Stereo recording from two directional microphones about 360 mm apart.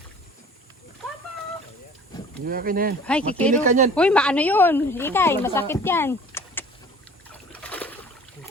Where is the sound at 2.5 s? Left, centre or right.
Right.